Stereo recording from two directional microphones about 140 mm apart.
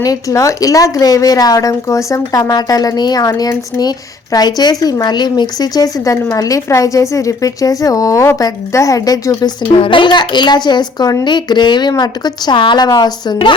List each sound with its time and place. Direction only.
0.0 s speech: 25° left (ahead or behind)
9.6 s a child's voice: 40° left (ahead or behind)